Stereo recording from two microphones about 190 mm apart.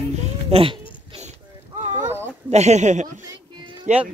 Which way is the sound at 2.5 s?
35° right (ahead or behind).